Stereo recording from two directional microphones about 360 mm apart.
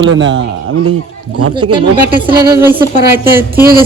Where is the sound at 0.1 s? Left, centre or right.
Right.